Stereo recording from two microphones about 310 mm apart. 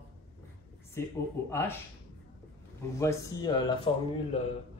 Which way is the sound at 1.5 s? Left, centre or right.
Centre.